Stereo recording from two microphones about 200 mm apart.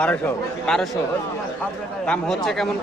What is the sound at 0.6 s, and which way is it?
Speech, 5° left (ahead or behind).